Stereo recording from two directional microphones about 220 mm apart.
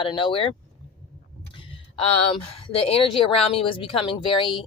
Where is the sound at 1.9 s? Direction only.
25° left (ahead or behind).